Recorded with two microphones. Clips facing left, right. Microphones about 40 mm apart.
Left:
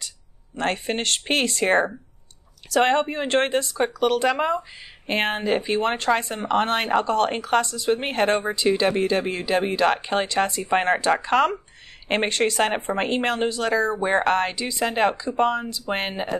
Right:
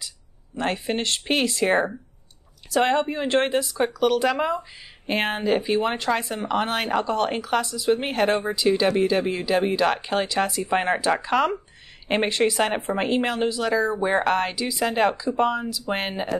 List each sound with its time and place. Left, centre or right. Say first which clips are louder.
0.6 s speech: even; centre